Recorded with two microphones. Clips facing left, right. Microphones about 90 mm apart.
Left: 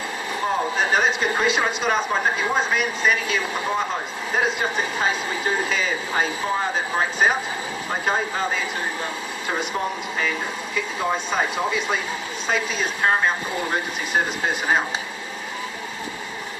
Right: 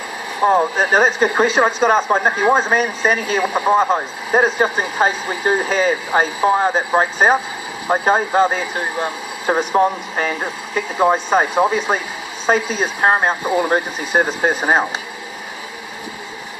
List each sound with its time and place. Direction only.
0.4 s speech: 40° right (ahead or behind)